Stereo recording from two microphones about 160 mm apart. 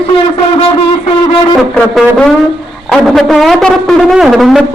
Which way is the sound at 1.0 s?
35° left (ahead or behind).